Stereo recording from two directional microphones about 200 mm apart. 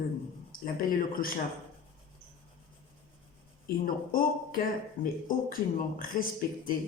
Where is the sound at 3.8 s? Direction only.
45° left (ahead or behind).